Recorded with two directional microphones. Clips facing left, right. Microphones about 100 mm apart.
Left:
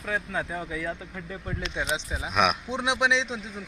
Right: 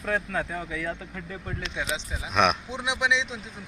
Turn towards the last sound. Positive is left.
turn(degrees=30)  # may be behind; listen again after turning